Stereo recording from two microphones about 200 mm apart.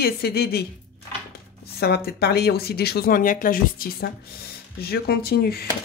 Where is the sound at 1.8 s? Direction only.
50° left (ahead or behind).